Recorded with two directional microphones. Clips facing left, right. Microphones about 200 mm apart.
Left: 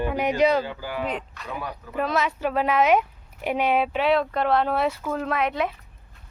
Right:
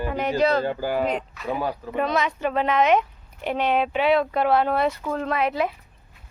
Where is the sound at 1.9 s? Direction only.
5° left (ahead or behind).